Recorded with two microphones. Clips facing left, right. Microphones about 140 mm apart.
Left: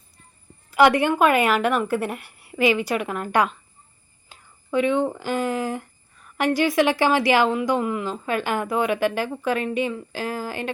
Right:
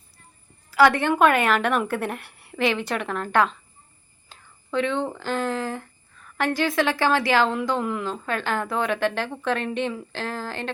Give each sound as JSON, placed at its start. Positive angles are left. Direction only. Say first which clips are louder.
{"t": 0.7, "sound": "a woman's voice", "louder": "left 1 dB", "side_deg": 15}
{"t": 4.3, "sound": "a sound", "louder": "left 3 dB", "side_deg": 10}
{"t": 6.6, "sound": "a woman's voice", "louder": "left 3 dB", "side_deg": 15}